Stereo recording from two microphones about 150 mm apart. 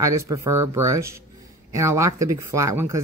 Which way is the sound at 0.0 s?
20° right (ahead or behind).